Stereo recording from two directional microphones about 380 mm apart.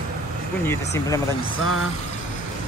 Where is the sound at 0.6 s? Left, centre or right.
Centre.